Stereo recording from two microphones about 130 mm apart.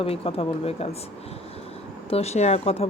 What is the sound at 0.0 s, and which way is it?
Speech, 50° left (ahead or behind).